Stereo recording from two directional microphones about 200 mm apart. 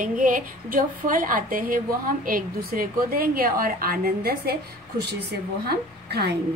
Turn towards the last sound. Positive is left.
turn(degrees=-55)  # may be behind; listen again after turning